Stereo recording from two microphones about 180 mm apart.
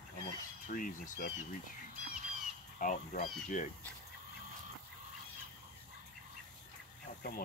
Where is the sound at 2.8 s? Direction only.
45° left (ahead or behind).